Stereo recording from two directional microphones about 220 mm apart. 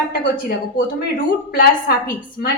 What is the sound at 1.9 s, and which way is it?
Speech, 45° left (ahead or behind).